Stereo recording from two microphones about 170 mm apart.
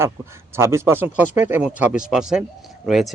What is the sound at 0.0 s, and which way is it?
A man's voice, 15° right (ahead or behind).